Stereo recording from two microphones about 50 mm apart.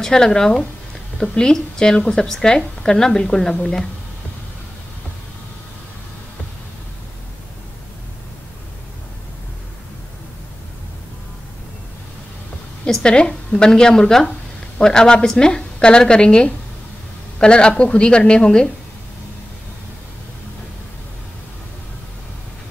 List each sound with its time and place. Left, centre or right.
0.0 s a woman's voice: centre
13.0 s a woman's voice: centre